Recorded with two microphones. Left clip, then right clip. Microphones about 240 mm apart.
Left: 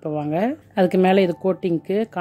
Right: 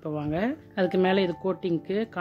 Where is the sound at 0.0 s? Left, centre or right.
Centre.